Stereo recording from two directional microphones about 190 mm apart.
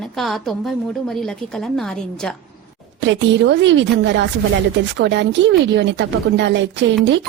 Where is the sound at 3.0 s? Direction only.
70° right (ahead or behind).